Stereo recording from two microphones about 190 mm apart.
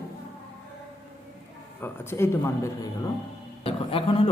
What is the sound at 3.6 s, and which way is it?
Speech, 30° left (ahead or behind).